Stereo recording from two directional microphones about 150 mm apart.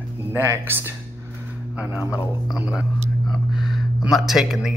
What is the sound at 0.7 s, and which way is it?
Speech, 15° right (ahead or behind).